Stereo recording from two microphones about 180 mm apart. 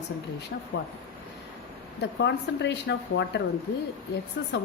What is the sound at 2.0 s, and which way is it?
Speech, 70° left (ahead or behind).